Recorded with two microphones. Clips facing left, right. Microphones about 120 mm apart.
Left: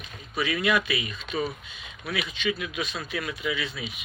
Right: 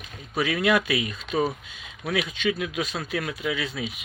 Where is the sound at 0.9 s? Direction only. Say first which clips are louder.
Right 4 dB; 85° right.